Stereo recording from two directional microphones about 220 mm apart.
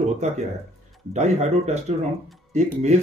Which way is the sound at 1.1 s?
30° right (ahead or behind).